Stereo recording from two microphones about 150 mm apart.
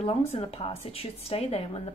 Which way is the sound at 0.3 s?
40° left (ahead or behind).